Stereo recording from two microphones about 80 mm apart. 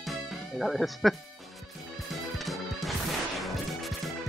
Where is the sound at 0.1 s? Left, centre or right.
Centre.